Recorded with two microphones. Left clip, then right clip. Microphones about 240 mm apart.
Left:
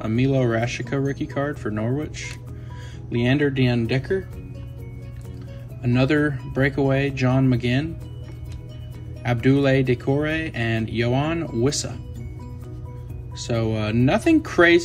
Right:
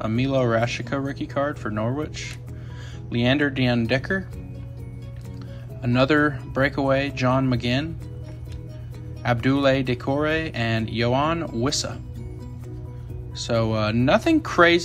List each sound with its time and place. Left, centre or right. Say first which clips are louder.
0.0 s speech: even; centre
5.8 s speech: right 1 dB; centre
9.2 s speech: even; centre
13.4 s speech: right 2 dB; centre